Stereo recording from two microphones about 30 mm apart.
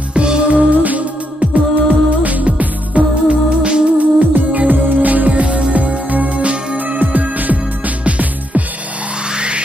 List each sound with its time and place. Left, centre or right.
0.1 s music: right
3.4 s music: right
4.0 s music: right
7.1 s music: right